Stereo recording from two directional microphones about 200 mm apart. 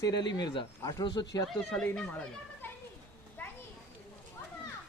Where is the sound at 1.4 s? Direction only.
5° left (ahead or behind).